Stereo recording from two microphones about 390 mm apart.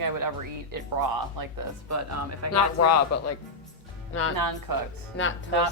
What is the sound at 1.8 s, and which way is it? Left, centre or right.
Speech, right.